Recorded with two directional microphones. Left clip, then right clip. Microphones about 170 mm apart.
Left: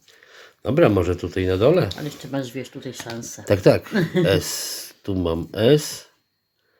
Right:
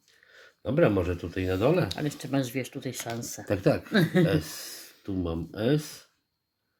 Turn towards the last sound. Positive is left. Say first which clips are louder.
# left 11 dB
turn(degrees=40)  # may be behind; listen again after turning